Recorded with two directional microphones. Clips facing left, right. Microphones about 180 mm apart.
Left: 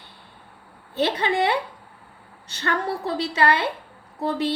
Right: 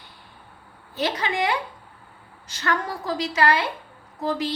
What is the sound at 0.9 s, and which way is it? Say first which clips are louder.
A woman's voice: left 3 dB; 30° left (ahead or behind).